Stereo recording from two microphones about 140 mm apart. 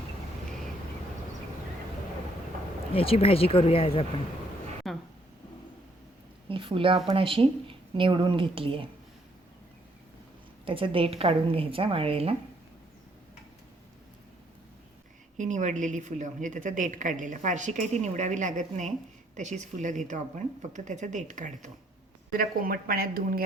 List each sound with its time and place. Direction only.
2.9 s speech: 40° left (ahead or behind)
4.8 s a sound: centre (ahead or behind)
6.5 s speech: 40° right (ahead or behind)
10.7 s a woman's voice: 40° right (ahead or behind)
15.4 s a woman's voice: 60° right (ahead or behind)
22.3 s a woman's voice: 90° right